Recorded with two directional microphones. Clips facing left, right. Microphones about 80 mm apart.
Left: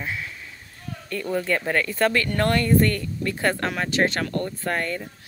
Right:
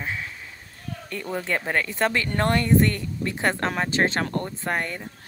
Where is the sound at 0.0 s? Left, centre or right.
Right.